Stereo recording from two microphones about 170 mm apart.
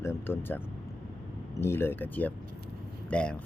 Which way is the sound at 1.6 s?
15° left (ahead or behind).